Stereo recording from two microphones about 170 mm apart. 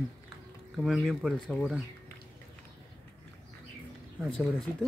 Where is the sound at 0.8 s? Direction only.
Centre (ahead or behind).